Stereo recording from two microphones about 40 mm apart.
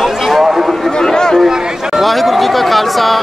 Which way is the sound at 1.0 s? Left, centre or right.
Centre.